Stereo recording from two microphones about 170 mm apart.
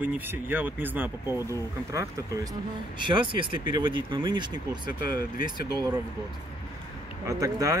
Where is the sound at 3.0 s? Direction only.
30° right (ahead or behind).